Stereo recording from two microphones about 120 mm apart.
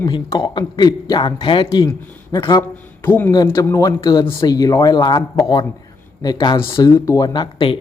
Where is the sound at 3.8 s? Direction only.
30° left (ahead or behind).